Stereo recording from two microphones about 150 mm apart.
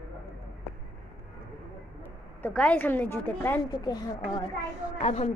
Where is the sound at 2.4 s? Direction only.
10° left (ahead or behind).